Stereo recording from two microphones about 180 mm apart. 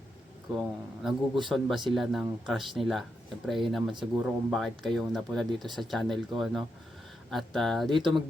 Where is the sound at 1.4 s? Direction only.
Centre (ahead or behind).